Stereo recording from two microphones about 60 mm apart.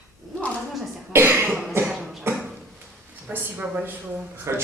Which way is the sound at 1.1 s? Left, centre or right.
Right.